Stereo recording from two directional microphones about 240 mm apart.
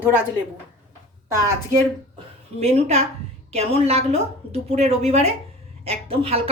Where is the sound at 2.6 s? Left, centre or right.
Right.